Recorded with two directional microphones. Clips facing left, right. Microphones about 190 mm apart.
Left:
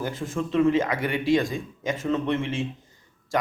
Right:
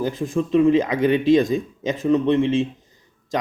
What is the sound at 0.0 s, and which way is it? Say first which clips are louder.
Speech: right 6 dB; 15° right (ahead or behind).